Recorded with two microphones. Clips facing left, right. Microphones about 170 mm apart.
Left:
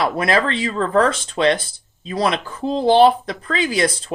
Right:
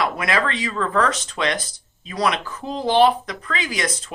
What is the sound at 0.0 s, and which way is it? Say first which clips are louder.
Speech: left 4 dB; 30° left (ahead or behind).